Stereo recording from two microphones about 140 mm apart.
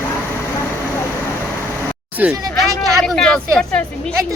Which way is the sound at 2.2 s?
10° right (ahead or behind).